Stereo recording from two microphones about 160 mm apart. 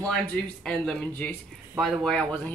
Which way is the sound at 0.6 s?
5° left (ahead or behind).